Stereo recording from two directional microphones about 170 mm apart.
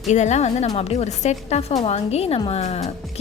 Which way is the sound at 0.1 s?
40° left (ahead or behind).